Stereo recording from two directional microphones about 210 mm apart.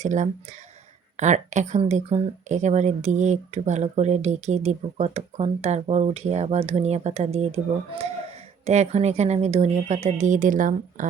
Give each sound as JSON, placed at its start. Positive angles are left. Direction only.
{"t": 0.0, "sound": "speech", "side_deg": -35}